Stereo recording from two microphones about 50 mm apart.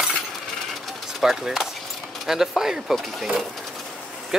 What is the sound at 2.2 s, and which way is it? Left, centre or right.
Speech, centre.